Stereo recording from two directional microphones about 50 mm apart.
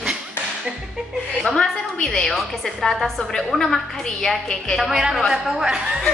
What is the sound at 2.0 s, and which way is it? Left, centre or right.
A woman's voice, centre.